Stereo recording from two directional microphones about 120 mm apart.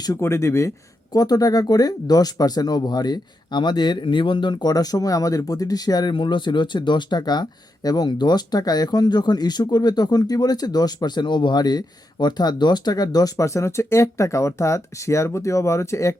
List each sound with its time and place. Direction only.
0.0 s speech: 25° left (ahead or behind)